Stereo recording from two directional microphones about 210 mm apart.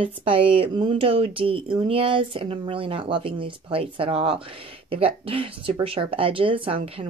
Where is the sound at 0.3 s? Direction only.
25° right (ahead or behind).